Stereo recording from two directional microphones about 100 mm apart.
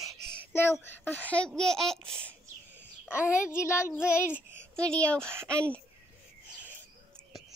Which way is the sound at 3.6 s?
30° left (ahead or behind).